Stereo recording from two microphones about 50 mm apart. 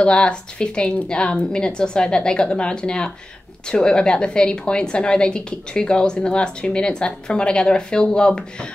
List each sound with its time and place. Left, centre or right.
0.0 s a woman's voice: centre